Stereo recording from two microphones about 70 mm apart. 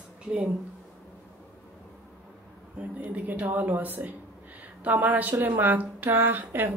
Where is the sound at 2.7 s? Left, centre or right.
Right.